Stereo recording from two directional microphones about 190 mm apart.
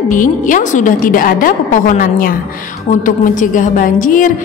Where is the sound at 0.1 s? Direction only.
45° left (ahead or behind).